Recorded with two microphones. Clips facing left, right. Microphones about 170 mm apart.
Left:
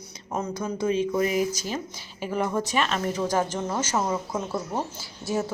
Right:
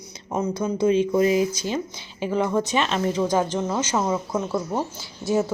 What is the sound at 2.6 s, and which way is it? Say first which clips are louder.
Speech: right 3 dB; 25° right (ahead or behind).